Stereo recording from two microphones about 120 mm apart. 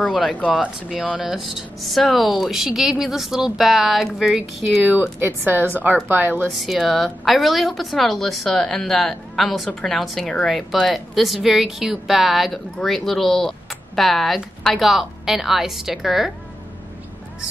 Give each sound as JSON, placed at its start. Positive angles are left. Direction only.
{"t": 0.5, "sound": "a woman's voice", "side_deg": -5}
{"t": 5.2, "sound": "speech", "side_deg": -15}
{"t": 6.4, "sound": "a woman's voice", "side_deg": 0}